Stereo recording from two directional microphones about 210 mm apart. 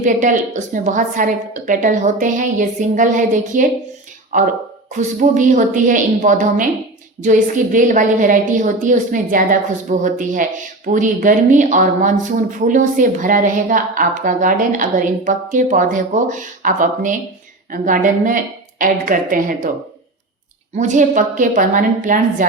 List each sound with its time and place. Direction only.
0.0 s a woman's voice: 35° right (ahead or behind)
20.7 s a woman's voice: 35° right (ahead or behind)